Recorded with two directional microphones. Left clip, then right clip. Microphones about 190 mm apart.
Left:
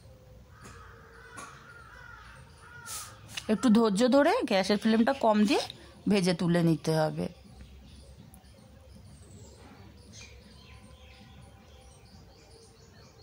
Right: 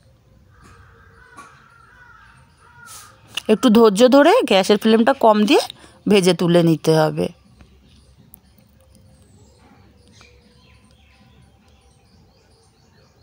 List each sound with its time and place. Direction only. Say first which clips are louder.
3.3 s speech: right 13 dB; 35° right (ahead or behind)